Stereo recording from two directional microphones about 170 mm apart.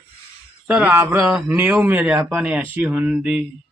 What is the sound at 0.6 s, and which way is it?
A man's voice, 10° right (ahead or behind).